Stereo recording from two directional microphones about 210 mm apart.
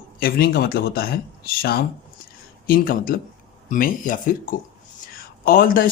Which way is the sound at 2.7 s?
40° left (ahead or behind).